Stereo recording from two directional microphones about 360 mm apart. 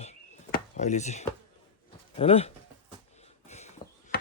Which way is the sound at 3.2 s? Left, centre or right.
Centre.